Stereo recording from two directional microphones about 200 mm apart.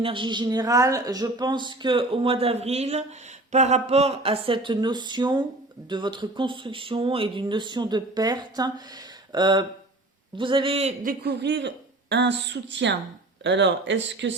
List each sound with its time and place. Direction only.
0.0 s speech: 25° right (ahead or behind)
11.0 s speech: 50° right (ahead or behind)